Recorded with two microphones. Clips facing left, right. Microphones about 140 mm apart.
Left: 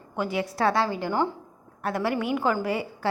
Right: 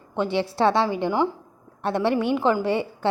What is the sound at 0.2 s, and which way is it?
A woman's voice, 30° right (ahead or behind).